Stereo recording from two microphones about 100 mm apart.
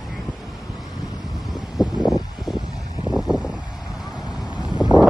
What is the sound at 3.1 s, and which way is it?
Vehicle, 10° right (ahead or behind).